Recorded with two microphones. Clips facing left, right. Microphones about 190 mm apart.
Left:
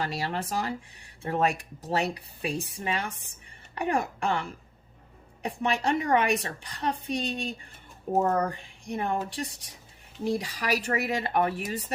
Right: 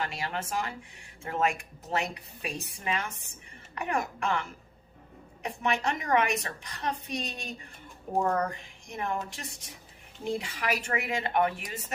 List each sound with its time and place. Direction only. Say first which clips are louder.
0.0 s a woman's voice: left 3 dB; 35° left (ahead or behind)